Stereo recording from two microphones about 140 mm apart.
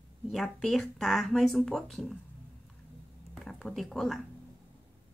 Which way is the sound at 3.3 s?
Centre (ahead or behind).